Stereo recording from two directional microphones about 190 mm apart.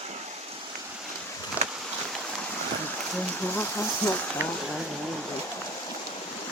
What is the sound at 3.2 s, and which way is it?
Speech, 10° left (ahead or behind).